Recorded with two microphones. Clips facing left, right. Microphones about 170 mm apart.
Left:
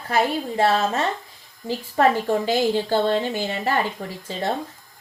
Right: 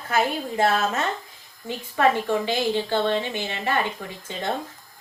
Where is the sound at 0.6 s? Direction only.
30° left (ahead or behind).